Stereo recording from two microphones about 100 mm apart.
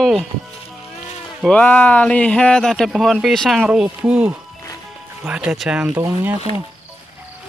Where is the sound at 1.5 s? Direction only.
15° left (ahead or behind); by 5.9 s 5° right (ahead or behind).